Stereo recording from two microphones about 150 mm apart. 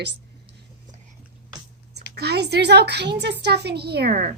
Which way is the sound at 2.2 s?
90° right.